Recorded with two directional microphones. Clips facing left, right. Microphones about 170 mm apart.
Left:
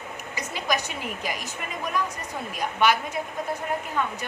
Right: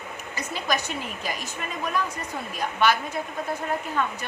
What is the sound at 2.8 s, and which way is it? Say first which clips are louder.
Speech: even; 15° left (ahead or behind).